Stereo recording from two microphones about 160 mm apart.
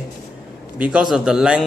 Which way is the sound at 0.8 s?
5° right (ahead or behind).